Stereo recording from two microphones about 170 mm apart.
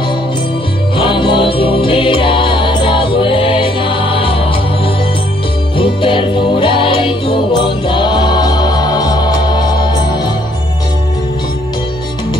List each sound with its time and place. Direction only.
0.9 s music: 30° left (ahead or behind)